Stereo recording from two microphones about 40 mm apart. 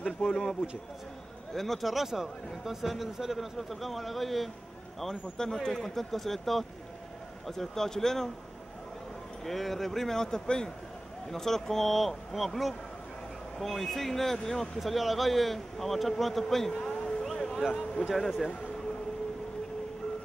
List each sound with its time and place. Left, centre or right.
0.0 s a man's voice: centre
5.0 s speech: centre
9.4 s speech: centre
14.8 s a man's voice: centre
17.6 s a man's voice: centre